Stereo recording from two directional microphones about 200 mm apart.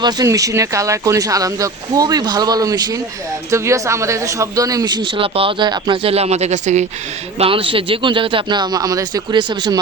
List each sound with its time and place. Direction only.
0.0 s a man's voice: 15° right (ahead or behind)